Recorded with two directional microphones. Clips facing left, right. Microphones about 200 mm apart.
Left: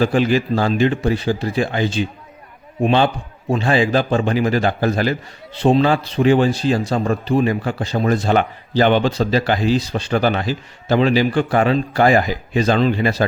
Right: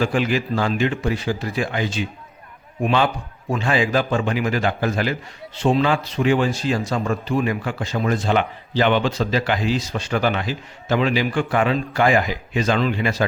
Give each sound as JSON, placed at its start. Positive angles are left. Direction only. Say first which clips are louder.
{"t": 0.0, "sound": "speech", "louder": "left 4 dB", "side_deg": 35}